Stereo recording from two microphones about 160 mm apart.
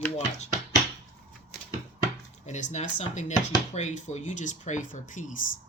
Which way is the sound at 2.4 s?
45° left (ahead or behind).